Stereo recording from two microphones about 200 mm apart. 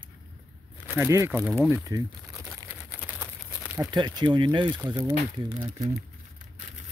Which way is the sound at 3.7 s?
20° right (ahead or behind).